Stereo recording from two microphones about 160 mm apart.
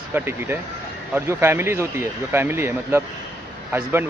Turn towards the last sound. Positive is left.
turn(degrees=-15)  # may be behind; listen again after turning